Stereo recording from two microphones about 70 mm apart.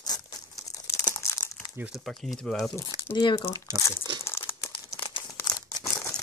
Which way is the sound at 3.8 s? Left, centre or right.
Left.